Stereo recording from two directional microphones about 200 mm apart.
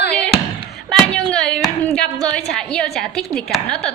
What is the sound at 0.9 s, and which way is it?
A woman's voice, 5° left (ahead or behind).